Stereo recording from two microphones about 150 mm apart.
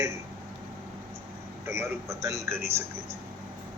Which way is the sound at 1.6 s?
20° right (ahead or behind).